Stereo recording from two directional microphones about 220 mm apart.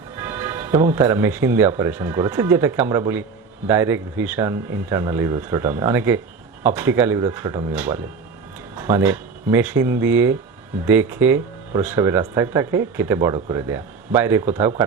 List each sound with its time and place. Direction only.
0.2 s speech: 10° right (ahead or behind)